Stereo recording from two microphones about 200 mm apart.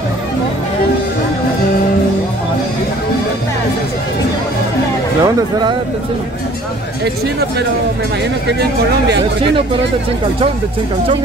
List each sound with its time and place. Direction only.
5.2 s speech: 20° right (ahead or behind)